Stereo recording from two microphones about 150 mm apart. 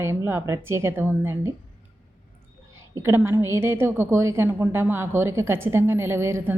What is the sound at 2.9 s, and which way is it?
Speech, 15° right (ahead or behind).